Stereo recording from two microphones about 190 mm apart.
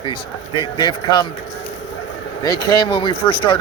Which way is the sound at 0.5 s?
25° left (ahead or behind).